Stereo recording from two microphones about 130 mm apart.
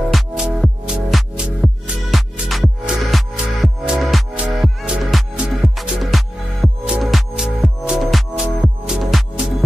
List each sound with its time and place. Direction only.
0.1 s music: 5° right (ahead or behind)